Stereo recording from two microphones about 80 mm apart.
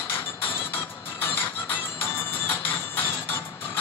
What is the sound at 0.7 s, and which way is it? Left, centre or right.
Music, left.